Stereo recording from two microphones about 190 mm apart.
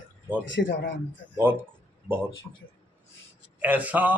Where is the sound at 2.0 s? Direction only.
10° right (ahead or behind).